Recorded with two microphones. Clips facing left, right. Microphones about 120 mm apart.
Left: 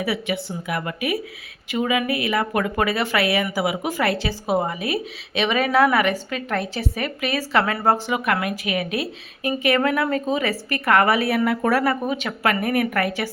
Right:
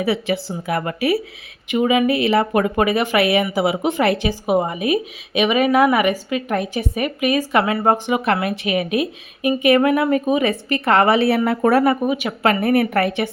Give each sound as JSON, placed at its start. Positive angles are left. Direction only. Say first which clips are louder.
{"t": 0.0, "sound": "a woman's voice", "louder": "right 4 dB", "side_deg": -30}
{"t": 1.7, "sound": "a woman's voice", "louder": "right 5 dB", "side_deg": -25}
{"t": 12.0, "sound": "a woman's voice", "louder": "right 4 dB", "side_deg": -10}
{"t": 12.4, "sound": "speech", "louder": "right 5 dB", "side_deg": -30}